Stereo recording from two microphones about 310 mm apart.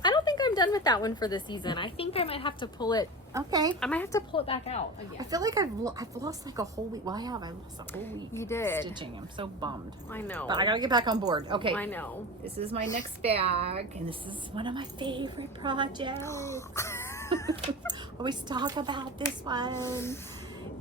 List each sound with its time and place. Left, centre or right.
0.0 s a woman's voice: centre
3.3 s a woman's voice: centre
3.8 s speech: centre
5.3 s a woman's voice: centre
8.3 s speech: centre
8.8 s a woman's voice: centre
10.1 s speech: centre
10.4 s a woman's voice: centre
11.7 s a woman's voice: centre
12.5 s a woman's voice: centre
16.1 s speech: centre
18.2 s a woman's voice: centre
19.8 s speech: centre